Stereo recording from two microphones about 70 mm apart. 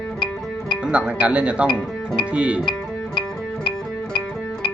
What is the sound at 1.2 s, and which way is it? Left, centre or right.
Speech, centre.